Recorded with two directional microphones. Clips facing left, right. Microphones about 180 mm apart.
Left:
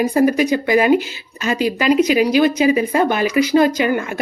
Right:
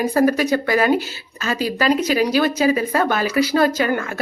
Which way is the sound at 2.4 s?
15° left (ahead or behind).